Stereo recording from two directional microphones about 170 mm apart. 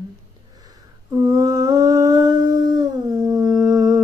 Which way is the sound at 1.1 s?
20° right (ahead or behind).